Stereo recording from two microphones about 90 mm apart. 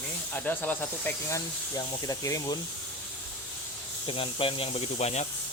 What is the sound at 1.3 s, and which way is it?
Speech, 35° left (ahead or behind).